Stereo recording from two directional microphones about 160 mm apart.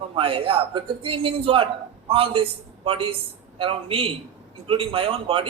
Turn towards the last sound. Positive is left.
turn(degrees=-35)  # may be behind; listen again after turning